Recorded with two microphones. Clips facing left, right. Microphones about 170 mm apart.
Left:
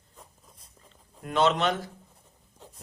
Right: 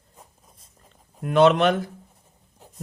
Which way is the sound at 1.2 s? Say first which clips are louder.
Right 7 dB; 55° right (ahead or behind).